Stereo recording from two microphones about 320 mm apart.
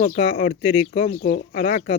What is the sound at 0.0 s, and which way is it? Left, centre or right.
Speech, left.